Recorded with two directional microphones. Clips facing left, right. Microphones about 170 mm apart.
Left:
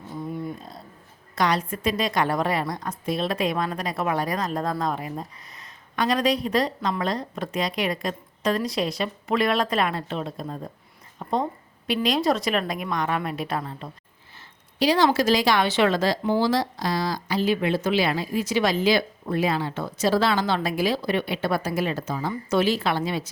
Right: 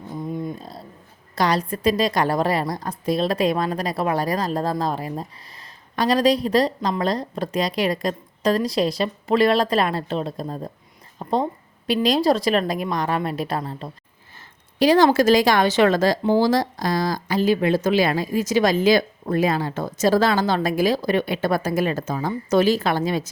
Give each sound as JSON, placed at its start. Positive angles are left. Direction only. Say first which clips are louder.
{"t": 0.1, "sound": "a sound", "louder": "right 3 dB", "side_deg": -20}
{"t": 1.4, "sound": "a woman's voice", "louder": "right 3 dB", "side_deg": -35}
{"t": 14.3, "sound": "speech", "louder": "right 5 dB", "side_deg": -50}